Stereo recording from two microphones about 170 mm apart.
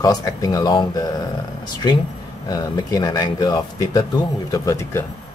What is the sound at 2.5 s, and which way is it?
Speech, 20° left (ahead or behind).